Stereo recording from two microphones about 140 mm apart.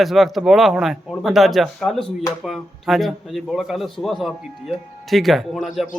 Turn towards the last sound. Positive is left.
turn(degrees=0)  # may be behind; listen again after turning